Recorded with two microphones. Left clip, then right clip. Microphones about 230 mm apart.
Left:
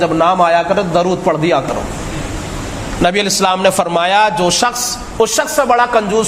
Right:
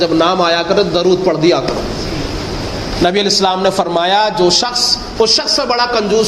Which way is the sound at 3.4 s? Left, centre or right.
Left.